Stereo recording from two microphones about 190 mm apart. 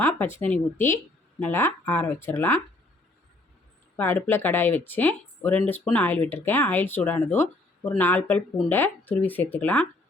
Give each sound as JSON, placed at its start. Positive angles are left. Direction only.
{"t": 0.0, "sound": "speech", "side_deg": 10}
{"t": 3.9, "sound": "speech", "side_deg": 10}